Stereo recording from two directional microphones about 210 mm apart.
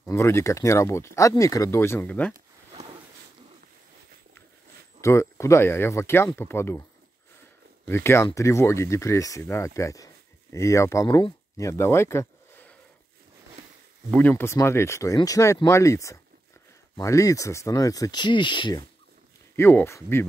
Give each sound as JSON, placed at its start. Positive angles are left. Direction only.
{"t": 0.0, "sound": "speech", "side_deg": 10}
{"t": 5.0, "sound": "speech", "side_deg": 15}
{"t": 7.8, "sound": "speech", "side_deg": 10}
{"t": 14.1, "sound": "speech", "side_deg": 10}
{"t": 19.5, "sound": "speech", "side_deg": 10}